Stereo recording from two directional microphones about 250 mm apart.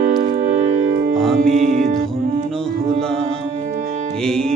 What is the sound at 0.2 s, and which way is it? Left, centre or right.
Music, right.